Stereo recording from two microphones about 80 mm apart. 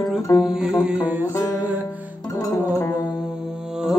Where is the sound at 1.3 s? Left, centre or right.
Left.